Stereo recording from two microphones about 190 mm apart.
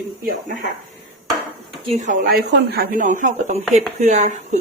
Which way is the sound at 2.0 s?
45° right (ahead or behind).